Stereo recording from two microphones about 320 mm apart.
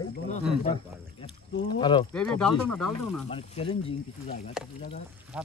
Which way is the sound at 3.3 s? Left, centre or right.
Centre.